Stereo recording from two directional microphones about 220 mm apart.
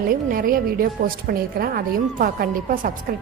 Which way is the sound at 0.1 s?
40° right (ahead or behind).